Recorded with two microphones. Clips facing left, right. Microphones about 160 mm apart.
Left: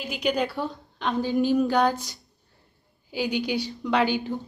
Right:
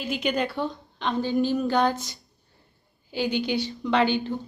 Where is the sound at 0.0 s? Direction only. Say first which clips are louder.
Even; 5° left (ahead or behind).